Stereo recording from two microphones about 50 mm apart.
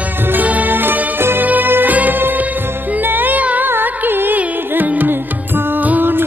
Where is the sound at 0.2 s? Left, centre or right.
Right.